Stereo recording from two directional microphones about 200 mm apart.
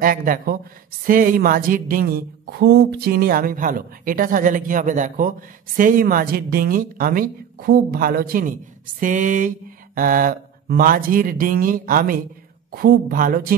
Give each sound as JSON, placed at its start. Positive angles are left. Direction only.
{"t": 0.0, "sound": "speech", "side_deg": -45}
{"t": 9.0, "sound": "a sound", "side_deg": -40}
{"t": 9.9, "sound": "speech", "side_deg": -45}